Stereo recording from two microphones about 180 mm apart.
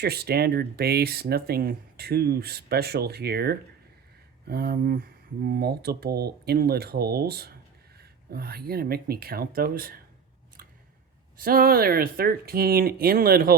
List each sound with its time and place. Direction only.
0.0 s speech: 60° right (ahead or behind)
11.3 s speech: 55° right (ahead or behind)